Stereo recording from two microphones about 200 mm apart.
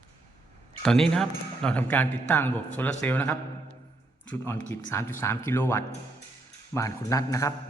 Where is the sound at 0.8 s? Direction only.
5° left (ahead or behind).